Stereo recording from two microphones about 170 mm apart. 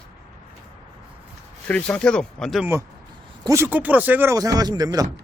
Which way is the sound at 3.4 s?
15° right (ahead or behind).